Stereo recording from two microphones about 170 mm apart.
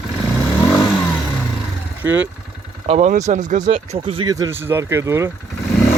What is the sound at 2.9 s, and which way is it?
Speech, 45° right (ahead or behind).